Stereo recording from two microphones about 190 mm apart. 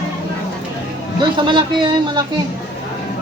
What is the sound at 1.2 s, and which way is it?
Speech, 25° right (ahead or behind).